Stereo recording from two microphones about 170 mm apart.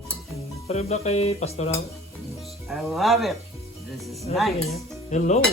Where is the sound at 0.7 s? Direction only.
40° left (ahead or behind).